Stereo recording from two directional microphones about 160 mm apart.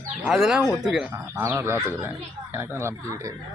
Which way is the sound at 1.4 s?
15° right (ahead or behind).